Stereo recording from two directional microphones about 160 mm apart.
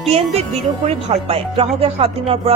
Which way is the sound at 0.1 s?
40° right (ahead or behind).